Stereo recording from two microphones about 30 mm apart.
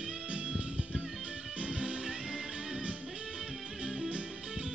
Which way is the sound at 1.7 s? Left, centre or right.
Right.